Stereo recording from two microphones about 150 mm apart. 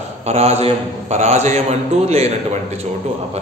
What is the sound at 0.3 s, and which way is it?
A man's voice, 45° right (ahead or behind).